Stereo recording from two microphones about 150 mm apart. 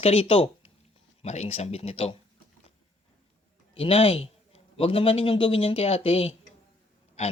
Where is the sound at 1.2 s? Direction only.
50° left (ahead or behind).